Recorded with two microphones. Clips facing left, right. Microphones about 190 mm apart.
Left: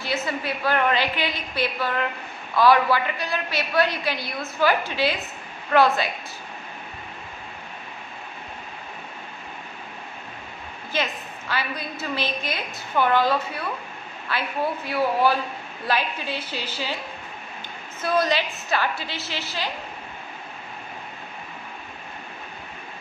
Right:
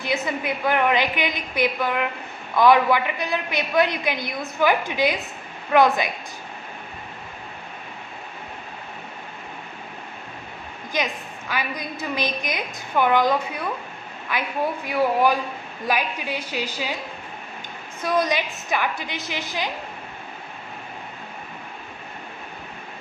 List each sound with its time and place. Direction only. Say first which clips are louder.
0.0 s a woman's voice: right 2 dB; 15° right (ahead or behind)
10.9 s a woman's voice: right 1 dB; 15° right (ahead or behind)
18.0 s a woman's voice: even; 15° right (ahead or behind)